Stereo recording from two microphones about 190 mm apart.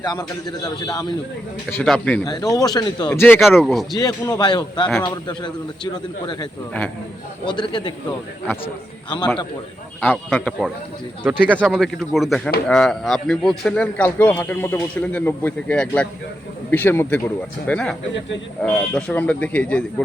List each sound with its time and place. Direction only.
0.0 s speech: 20° left (ahead or behind)
1.7 s speech: 5° left (ahead or behind)
2.2 s speech: 20° left (ahead or behind)
3.6 s speech: centre (ahead or behind)
3.9 s speech: 20° left (ahead or behind)
10.0 s speech: 5° left (ahead or behind)